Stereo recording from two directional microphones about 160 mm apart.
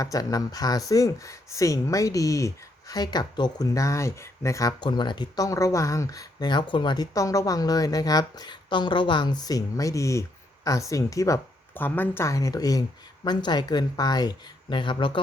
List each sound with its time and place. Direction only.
0.0 s speech: 20° left (ahead or behind)